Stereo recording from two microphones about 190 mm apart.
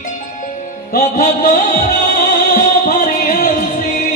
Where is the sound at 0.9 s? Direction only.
45° left (ahead or behind).